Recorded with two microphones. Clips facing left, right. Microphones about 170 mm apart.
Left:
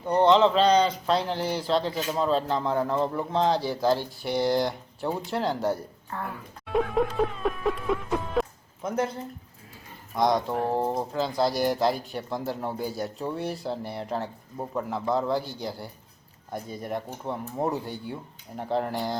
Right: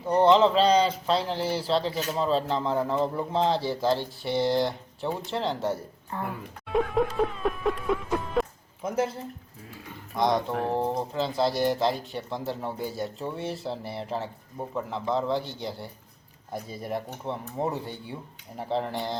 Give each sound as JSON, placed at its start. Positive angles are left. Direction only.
{"t": 0.0, "sound": "speech", "side_deg": -5}
{"t": 6.7, "sound": "music", "side_deg": 0}
{"t": 10.2, "sound": "speech", "side_deg": 0}